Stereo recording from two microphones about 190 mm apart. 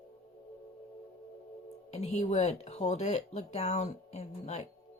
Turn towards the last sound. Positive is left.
turn(degrees=35)  # may be behind; listen again after turning